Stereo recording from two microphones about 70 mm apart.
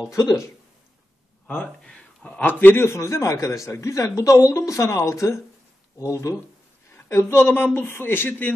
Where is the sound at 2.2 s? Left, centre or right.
Left.